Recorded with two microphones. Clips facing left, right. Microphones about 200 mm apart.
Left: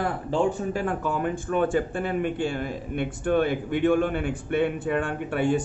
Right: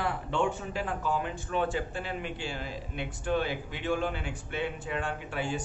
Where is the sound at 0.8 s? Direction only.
55° left (ahead or behind).